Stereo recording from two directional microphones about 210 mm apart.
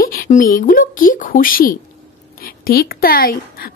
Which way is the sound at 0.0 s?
40° left (ahead or behind).